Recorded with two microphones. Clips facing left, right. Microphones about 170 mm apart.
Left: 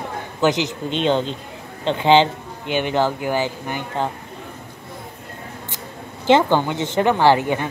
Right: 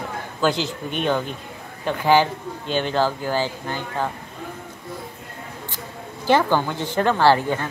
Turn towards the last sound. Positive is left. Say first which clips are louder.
# left 1 dB
turn(degrees=15)  # may be behind; listen again after turning